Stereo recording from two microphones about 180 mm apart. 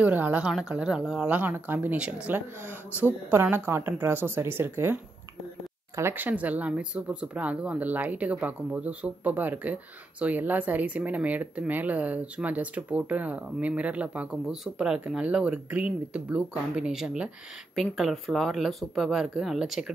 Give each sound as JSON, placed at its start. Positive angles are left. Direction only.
{"t": 0.0, "sound": "speech", "side_deg": -10}
{"t": 5.9, "sound": "speech", "side_deg": -10}